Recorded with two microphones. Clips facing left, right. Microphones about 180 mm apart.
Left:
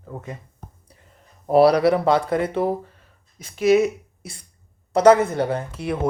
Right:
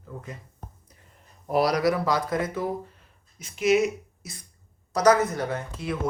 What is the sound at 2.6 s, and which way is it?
Speech, 60° left (ahead or behind).